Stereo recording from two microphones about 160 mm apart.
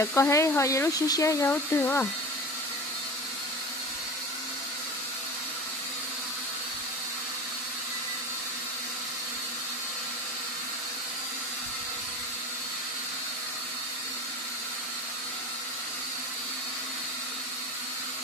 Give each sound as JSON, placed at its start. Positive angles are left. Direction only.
{"t": 0.0, "sound": "speech", "side_deg": 15}